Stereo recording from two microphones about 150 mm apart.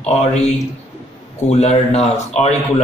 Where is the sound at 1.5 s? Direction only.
50° left (ahead or behind).